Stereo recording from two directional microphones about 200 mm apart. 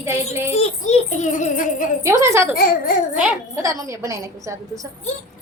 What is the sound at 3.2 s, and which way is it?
A woman's voice, 10° right (ahead or behind).